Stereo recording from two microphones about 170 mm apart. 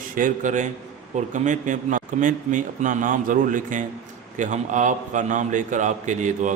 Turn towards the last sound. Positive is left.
turn(degrees=-45)  # may be behind; listen again after turning